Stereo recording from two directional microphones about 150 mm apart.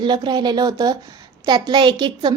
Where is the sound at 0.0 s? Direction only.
30° right (ahead or behind).